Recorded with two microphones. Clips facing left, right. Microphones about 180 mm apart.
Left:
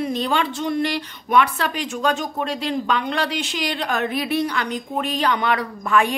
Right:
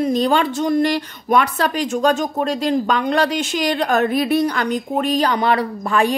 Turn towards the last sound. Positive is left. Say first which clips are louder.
# right 2 dB
turn(degrees=-35)  # may be behind; listen again after turning